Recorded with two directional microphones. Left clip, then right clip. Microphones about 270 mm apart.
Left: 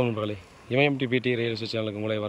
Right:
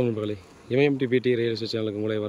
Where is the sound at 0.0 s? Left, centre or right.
Centre.